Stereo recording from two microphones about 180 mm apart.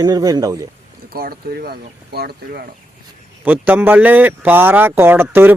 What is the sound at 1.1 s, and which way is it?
Speech, 55° right (ahead or behind).